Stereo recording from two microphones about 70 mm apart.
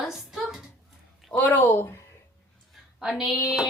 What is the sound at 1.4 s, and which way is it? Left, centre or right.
Speech, left.